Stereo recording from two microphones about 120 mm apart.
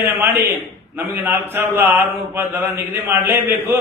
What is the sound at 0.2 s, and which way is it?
A man's voice, 15° right (ahead or behind).